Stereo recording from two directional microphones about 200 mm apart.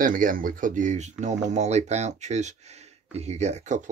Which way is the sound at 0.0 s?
45° right (ahead or behind).